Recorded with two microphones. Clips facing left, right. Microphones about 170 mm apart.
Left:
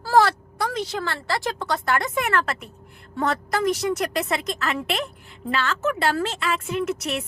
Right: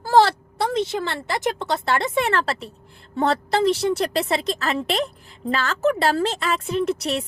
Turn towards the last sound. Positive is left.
turn(degrees=-35)  # may be behind; listen again after turning